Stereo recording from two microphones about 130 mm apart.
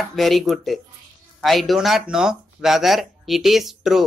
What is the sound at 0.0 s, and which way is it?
Speech, centre (ahead or behind).